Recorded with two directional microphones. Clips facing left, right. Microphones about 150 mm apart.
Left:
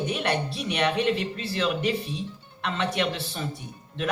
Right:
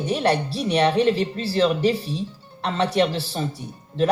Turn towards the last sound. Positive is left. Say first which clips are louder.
# right 11 dB
turn(degrees=-35)  # may be behind; listen again after turning